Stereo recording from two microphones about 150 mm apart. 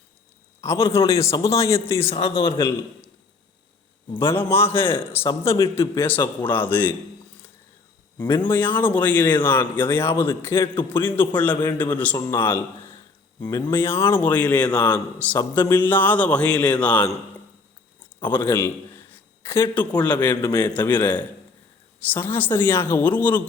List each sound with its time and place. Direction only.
0.6 s a man's voice: 20° left (ahead or behind)
2.0 s speech: 40° left (ahead or behind)
2.5 s a man's voice: 20° left (ahead or behind)
4.2 s speech: 15° left (ahead or behind)
5.2 s speech: 35° left (ahead or behind)
5.9 s speech: 15° left (ahead or behind)
8.4 s speech: 15° left (ahead or behind)
18.2 s speech: 15° left (ahead or behind)
20.0 s speech: 10° left (ahead or behind)
20.3 s a man's voice: 25° left (ahead or behind)
20.7 s speech: 15° left (ahead or behind)